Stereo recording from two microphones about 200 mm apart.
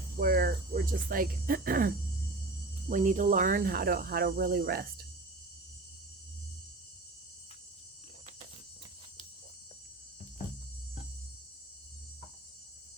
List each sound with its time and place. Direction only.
0.2 s speech: 50° right (ahead or behind)
2.9 s speech: 40° right (ahead or behind)